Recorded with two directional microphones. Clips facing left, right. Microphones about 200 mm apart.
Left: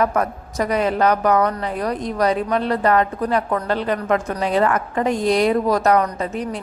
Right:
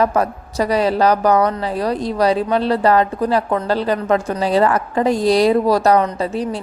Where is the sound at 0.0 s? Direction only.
30° right (ahead or behind).